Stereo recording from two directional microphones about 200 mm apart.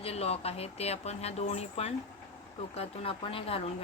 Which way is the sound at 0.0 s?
30° left (ahead or behind).